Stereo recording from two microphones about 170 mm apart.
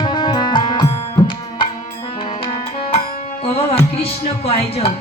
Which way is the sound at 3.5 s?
35° left (ahead or behind).